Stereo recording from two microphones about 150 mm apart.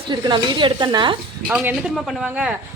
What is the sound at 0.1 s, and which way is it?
Speech, 30° right (ahead or behind).